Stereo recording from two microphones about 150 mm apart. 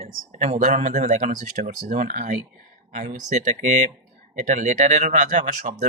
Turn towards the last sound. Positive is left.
turn(degrees=-55)  # may be behind; listen again after turning